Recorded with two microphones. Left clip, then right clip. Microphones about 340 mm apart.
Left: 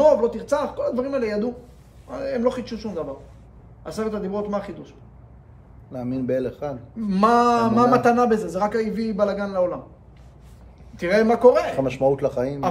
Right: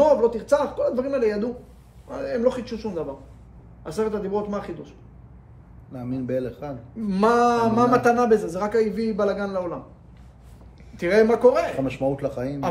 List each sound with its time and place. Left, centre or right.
0.0 s a man's voice: centre
5.9 s a man's voice: left
7.0 s a man's voice: centre
11.0 s a man's voice: centre
11.8 s speech: left